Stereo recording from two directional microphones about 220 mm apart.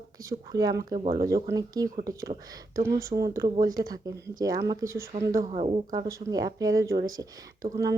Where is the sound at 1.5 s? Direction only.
15° right (ahead or behind).